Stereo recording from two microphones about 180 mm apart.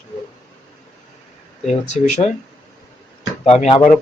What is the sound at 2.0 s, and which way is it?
Speech, 40° left (ahead or behind).